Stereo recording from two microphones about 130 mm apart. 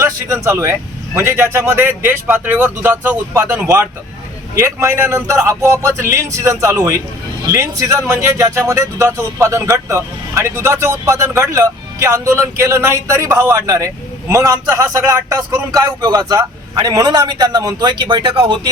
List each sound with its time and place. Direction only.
0.4 s a man's voice: 20° right (ahead or behind); by 18.7 s 40° right (ahead or behind)